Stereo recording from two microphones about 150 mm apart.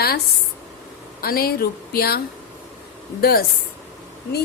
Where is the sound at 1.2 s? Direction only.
90° left.